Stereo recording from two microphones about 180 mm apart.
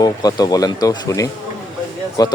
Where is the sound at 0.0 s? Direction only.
20° left (ahead or behind).